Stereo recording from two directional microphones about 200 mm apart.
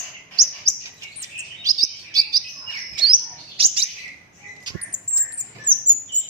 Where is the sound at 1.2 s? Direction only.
15° right (ahead or behind).